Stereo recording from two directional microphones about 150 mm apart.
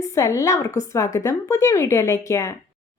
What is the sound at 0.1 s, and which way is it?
Speech, 20° left (ahead or behind).